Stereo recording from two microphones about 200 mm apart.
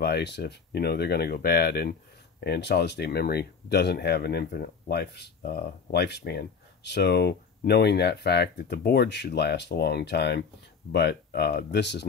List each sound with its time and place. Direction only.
0.0 s speech: 55° left (ahead or behind)